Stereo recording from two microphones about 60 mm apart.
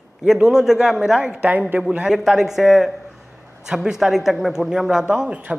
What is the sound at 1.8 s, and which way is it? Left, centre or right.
A man's voice, centre.